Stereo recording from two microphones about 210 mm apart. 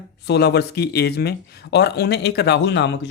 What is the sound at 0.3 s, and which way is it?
Speech, 50° left (ahead or behind).